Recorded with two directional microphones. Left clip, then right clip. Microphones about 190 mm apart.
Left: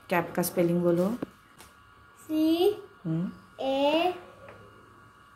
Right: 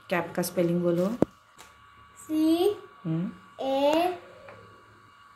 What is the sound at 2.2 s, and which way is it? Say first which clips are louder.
A woman's voice: even; centre (ahead or behind).